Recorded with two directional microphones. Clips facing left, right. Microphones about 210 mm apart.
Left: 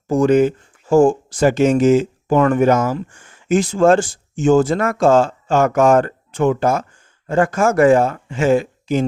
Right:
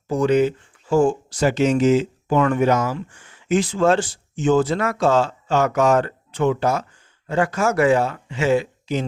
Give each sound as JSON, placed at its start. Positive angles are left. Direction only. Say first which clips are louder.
{"t": 0.1, "sound": "speech", "louder": "left 4 dB", "side_deg": 45}